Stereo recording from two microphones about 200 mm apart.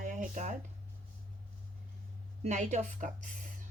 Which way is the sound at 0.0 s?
40° right (ahead or behind).